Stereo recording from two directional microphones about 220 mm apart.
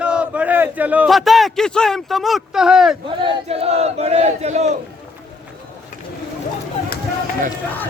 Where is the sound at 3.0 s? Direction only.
25° right (ahead or behind).